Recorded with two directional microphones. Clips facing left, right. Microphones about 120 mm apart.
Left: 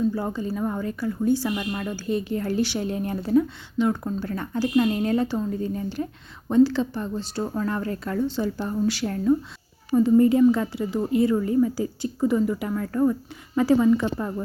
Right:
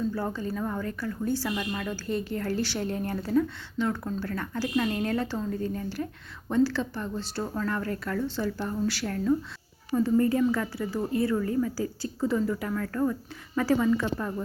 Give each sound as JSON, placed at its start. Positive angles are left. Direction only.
{"t": 0.1, "sound": "a woman's voice", "side_deg": 15}